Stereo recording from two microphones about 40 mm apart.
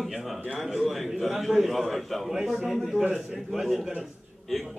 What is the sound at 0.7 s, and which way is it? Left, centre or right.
A man's voice, centre.